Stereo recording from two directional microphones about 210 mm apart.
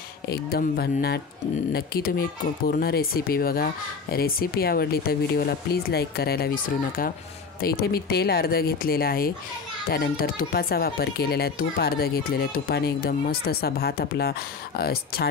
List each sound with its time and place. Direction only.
0.3 s speech: 45° left (ahead or behind)